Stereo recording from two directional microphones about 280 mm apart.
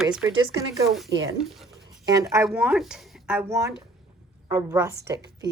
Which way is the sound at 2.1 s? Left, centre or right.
Centre.